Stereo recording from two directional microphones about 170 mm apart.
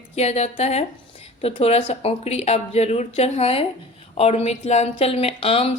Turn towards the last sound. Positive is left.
turn(degrees=35)  # may be behind; listen again after turning